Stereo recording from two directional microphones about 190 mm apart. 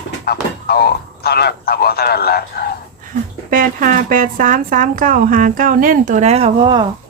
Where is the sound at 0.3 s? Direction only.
55° left (ahead or behind).